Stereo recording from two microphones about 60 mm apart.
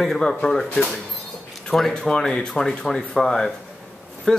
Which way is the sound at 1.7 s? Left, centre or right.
Centre.